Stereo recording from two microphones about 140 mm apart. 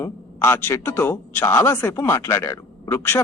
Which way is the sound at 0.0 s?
15° left (ahead or behind).